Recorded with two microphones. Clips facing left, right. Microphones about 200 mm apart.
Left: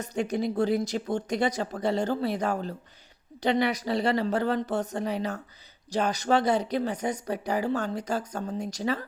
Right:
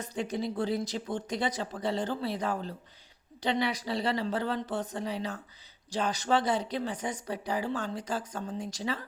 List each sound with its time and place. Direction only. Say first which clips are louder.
0.0 s speech: left 5 dB; 45° left (ahead or behind)